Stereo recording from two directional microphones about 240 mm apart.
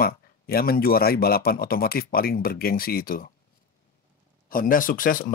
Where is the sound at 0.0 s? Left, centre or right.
Left.